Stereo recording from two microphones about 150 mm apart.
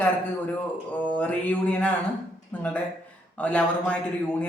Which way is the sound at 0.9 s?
10° left (ahead or behind).